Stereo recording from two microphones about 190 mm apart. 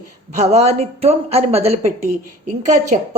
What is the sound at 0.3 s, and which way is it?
Speech, 35° right (ahead or behind).